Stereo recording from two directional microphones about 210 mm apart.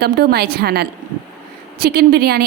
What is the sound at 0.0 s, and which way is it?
A woman's voice, 50° right (ahead or behind).